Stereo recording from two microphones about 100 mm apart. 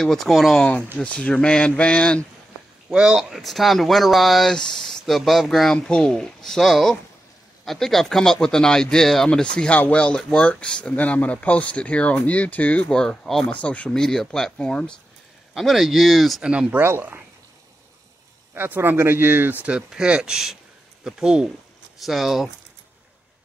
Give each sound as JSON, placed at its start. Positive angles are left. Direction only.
{"t": 0.0, "sound": "speech", "side_deg": 0}
{"t": 2.9, "sound": "speech", "side_deg": -10}
{"t": 16.8, "sound": "speech", "side_deg": -20}
{"t": 18.5, "sound": "speech", "side_deg": -20}
{"t": 19.6, "sound": "speech", "side_deg": -10}